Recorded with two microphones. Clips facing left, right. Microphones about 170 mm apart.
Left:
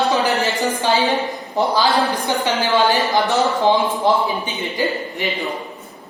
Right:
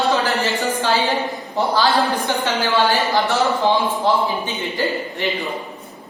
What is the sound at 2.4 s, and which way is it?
Speech, 20° left (ahead or behind).